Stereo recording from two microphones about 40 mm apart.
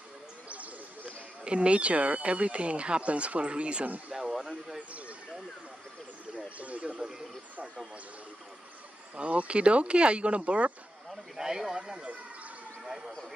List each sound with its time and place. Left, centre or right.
0.5 s speech: right
4.1 s speech: centre
4.7 s speech: right
6.3 s a sound: right
6.9 s speech: centre
9.2 s speech: right
11.1 s speech: centre
12.8 s a sound: centre